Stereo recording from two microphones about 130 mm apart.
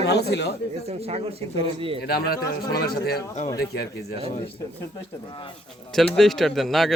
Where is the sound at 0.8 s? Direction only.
50° right (ahead or behind).